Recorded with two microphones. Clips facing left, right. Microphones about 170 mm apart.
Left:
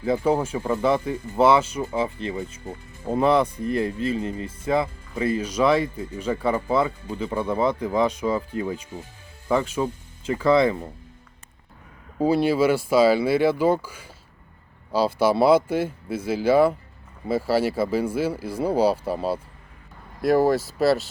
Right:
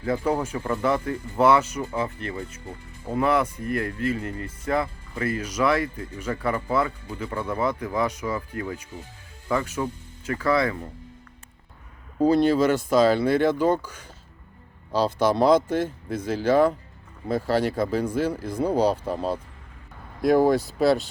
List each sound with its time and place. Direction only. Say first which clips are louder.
0.3 s speech: left 4 dB; 25° left (ahead or behind)
0.6 s speech: left 2 dB; 15° left (ahead or behind)
2.1 s speech: left 3 dB; 25° left (ahead or behind)
5.5 s speech: left 2 dB; 25° left (ahead or behind)
12.2 s speech: right 1 dB; 5° left (ahead or behind)